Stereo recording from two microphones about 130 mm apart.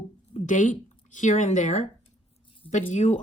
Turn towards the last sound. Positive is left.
turn(degrees=65)  # may be behind; listen again after turning